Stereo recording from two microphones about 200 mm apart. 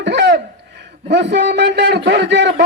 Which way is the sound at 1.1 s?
60° right (ahead or behind).